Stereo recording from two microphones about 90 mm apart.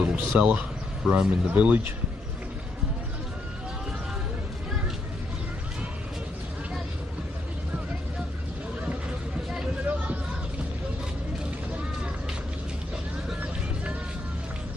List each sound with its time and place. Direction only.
0.0 s speech: 15° right (ahead or behind)
1.5 s speech: 20° right (ahead or behind)
9.5 s vehicle: 10° right (ahead or behind)